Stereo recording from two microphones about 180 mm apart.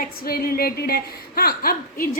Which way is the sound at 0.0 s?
55° left (ahead or behind).